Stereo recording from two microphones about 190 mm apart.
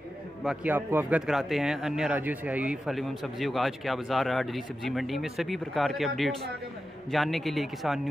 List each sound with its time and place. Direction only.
0.4 s speech: 5° right (ahead or behind)